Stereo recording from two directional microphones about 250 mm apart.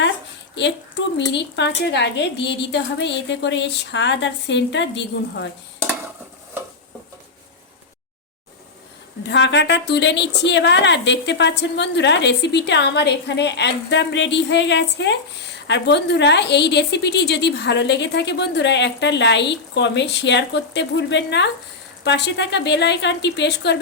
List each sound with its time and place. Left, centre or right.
1.0 s a woman's voice: left
9.2 s a woman's voice: left